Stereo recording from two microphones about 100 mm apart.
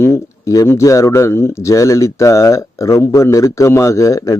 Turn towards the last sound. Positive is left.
turn(degrees=30)  # may be behind; listen again after turning